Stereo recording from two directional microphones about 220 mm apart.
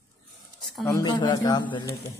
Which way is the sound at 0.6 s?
Centre (ahead or behind).